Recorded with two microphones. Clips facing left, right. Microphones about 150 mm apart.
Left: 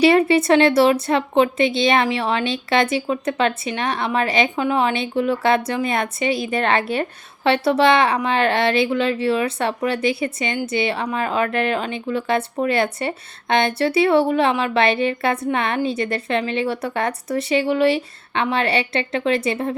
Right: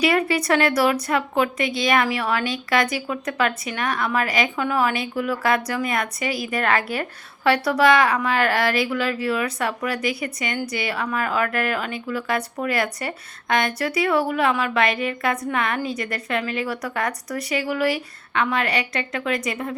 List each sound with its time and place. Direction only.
0.0 s a woman's voice: 25° left (ahead or behind)